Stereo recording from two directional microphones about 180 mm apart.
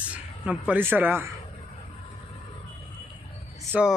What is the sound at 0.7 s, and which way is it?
Speech, 10° right (ahead or behind).